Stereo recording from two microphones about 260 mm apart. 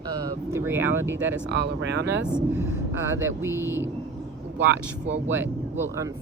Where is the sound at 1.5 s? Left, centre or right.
Right.